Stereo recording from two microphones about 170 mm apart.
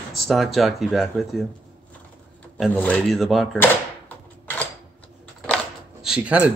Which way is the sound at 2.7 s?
10° left (ahead or behind).